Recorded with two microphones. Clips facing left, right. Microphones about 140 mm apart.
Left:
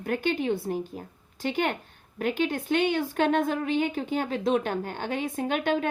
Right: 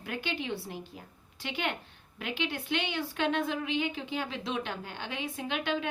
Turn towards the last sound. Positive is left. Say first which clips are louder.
# left 6 dB
turn(degrees=45)  # may be behind; listen again after turning